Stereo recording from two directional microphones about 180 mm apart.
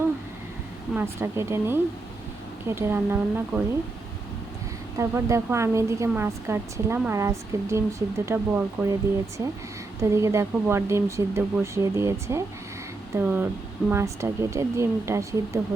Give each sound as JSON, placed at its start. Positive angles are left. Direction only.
{"t": 0.9, "sound": "a woman's voice", "side_deg": -15}
{"t": 4.9, "sound": "a woman's voice", "side_deg": -15}
{"t": 10.0, "sound": "a woman's voice", "side_deg": -15}